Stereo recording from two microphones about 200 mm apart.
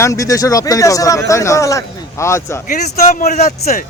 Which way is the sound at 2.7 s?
40° left (ahead or behind).